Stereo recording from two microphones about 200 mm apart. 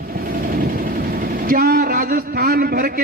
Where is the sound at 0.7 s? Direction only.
45° right (ahead or behind).